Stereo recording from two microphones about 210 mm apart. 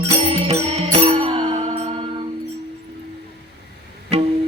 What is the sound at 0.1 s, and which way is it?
Music, 25° right (ahead or behind).